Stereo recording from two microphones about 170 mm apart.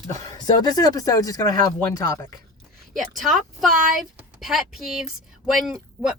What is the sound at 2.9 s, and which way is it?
Speech, centre (ahead or behind).